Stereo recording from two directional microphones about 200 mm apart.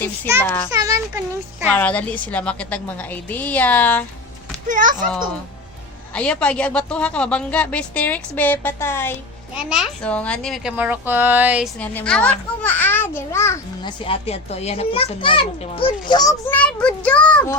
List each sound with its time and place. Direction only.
0.4 s a woman's voice: 10° left (ahead or behind)
0.7 s a child's voice: 15° right (ahead or behind)
1.7 s a woman's voice: 5° left (ahead or behind)
4.7 s a child's voice: 40° right (ahead or behind)
6.1 s a woman's voice: 5° left (ahead or behind)
9.6 s speech: 5° right (ahead or behind)
11.8 s a woman's voice: 5° left (ahead or behind)
14.0 s a child's voice: 30° left (ahead or behind)
16.5 s speech: 5° left (ahead or behind)